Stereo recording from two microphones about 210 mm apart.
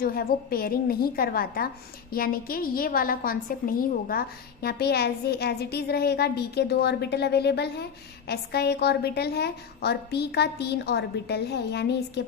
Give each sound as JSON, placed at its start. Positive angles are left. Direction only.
{"t": 0.0, "sound": "a woman's voice", "side_deg": 45}